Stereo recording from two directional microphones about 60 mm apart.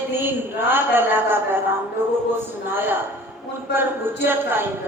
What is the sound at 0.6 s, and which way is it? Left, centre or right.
Speech, right.